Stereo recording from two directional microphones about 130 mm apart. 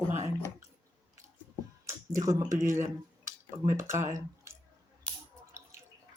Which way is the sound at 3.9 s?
65° right (ahead or behind).